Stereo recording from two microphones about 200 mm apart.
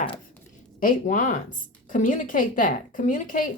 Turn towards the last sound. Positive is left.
turn(degrees=40)  # may be behind; listen again after turning